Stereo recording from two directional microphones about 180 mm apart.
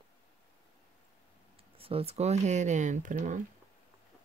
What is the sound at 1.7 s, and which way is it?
Speech, 30° right (ahead or behind).